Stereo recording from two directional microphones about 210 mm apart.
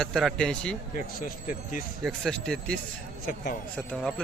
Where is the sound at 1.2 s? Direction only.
40° left (ahead or behind).